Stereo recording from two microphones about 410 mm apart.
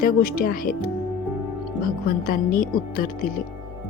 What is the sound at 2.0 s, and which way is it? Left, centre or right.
A woman's voice, left.